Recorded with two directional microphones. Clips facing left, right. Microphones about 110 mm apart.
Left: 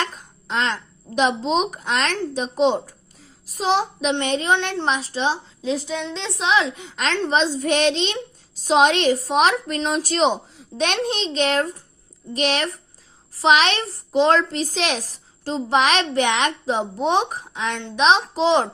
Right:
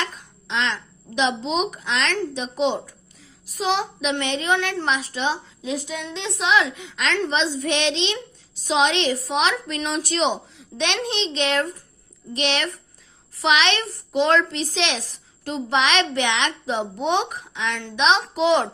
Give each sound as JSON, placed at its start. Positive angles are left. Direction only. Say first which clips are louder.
{"t": 0.0, "sound": "a child's voice", "louder": "left 2 dB", "side_deg": 40}
{"t": 4.5, "sound": "a woman's voice", "louder": "left 1 dB", "side_deg": 25}